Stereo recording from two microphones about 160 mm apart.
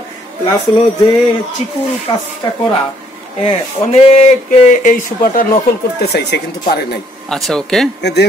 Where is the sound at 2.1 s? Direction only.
25° left (ahead or behind).